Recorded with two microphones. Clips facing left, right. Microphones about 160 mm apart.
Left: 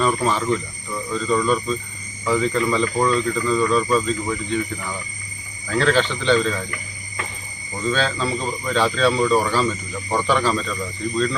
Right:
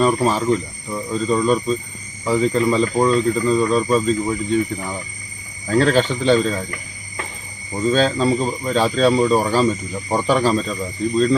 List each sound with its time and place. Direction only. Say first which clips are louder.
0.0 s speech: right 3 dB; 35° right (ahead or behind)
7.8 s speech: right 5 dB; 40° right (ahead or behind)